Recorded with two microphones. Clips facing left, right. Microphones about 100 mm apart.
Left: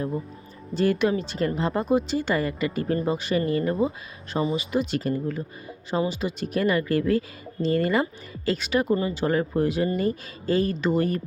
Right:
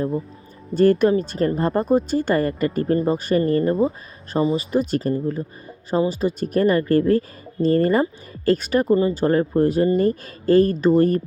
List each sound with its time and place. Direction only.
0.7 s speech: 45° right (ahead or behind)